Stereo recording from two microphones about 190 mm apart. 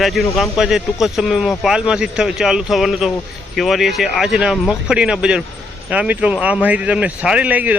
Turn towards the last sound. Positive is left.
turn(degrees=-10)  # may be behind; listen again after turning